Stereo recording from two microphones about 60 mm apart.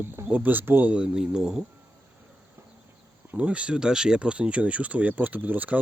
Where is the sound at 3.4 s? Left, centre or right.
Centre.